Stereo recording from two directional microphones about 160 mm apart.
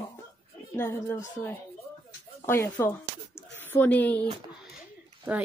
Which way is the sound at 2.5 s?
15° left (ahead or behind).